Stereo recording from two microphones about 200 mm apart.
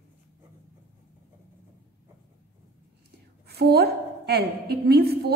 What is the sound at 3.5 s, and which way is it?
A woman's voice, 50° right (ahead or behind).